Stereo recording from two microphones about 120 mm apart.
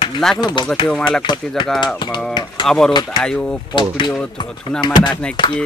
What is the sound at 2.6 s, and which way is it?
Speech, 5° left (ahead or behind).